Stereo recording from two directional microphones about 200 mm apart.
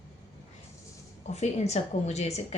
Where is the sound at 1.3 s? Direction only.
35° left (ahead or behind).